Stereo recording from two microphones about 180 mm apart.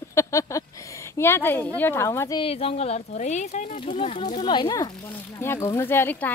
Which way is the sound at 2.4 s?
30° left (ahead or behind).